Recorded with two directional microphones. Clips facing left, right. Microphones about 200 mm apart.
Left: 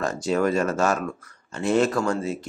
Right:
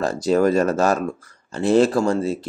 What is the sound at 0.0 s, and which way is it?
Speech, 35° right (ahead or behind).